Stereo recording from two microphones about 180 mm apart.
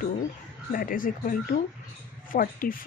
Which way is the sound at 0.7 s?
50° left (ahead or behind).